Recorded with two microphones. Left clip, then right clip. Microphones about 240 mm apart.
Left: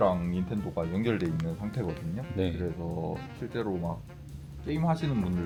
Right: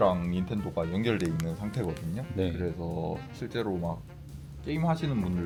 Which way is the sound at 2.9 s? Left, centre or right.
Right.